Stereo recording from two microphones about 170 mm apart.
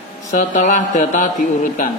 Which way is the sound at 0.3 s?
50° left (ahead or behind).